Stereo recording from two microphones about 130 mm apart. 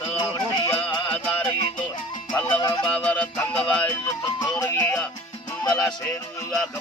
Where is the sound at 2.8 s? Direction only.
10° left (ahead or behind).